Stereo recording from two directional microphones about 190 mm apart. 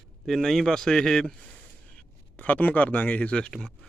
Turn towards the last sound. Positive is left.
turn(degrees=5)  # may be behind; listen again after turning